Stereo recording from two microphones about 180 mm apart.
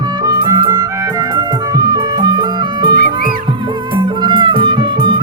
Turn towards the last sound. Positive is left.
turn(degrees=-25)  # may be behind; listen again after turning